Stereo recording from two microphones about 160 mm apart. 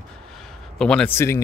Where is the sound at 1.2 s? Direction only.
15° left (ahead or behind).